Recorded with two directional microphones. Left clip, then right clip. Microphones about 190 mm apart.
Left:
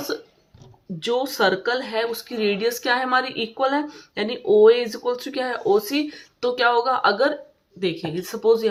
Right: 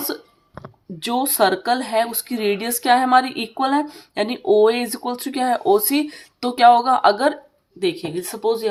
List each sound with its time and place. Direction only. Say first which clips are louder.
0.9 s speech: right 3 dB; 35° right (ahead or behind)